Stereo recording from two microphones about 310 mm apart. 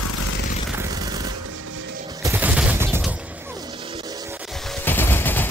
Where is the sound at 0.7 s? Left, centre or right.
Centre.